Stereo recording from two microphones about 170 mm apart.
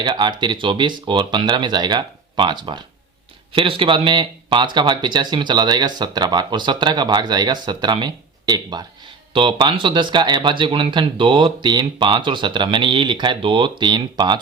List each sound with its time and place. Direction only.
0.0 s speech: 25° right (ahead or behind)